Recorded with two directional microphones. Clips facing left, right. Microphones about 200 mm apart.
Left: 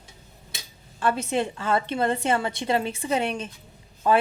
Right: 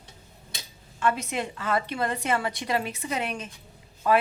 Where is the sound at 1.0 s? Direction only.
30° left (ahead or behind).